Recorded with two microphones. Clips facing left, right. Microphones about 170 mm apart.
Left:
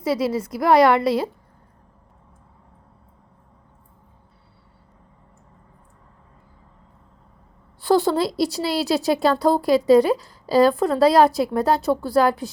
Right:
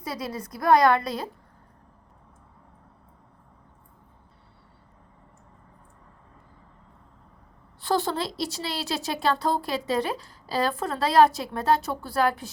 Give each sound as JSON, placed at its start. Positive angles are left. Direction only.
{"t": 0.0, "sound": "a woman's voice", "side_deg": 90}
{"t": 7.8, "sound": "a woman's voice", "side_deg": 35}